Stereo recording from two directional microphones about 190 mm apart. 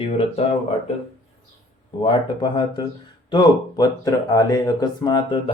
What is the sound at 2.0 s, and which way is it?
Speech, 20° left (ahead or behind).